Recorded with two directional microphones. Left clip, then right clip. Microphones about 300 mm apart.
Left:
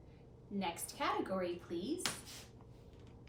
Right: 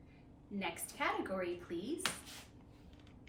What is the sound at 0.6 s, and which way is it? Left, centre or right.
A woman's voice, centre.